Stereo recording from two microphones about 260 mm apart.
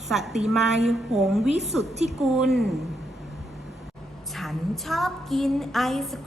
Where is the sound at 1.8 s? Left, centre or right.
Right.